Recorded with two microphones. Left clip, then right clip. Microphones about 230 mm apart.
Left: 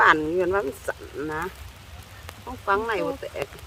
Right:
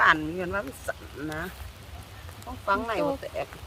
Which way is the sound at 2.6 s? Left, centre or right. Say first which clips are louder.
Left 3 dB; centre.